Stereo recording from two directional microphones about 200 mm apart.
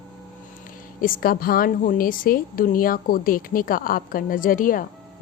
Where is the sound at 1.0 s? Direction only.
45° left (ahead or behind).